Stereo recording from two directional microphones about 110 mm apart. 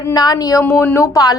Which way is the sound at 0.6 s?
20° left (ahead or behind).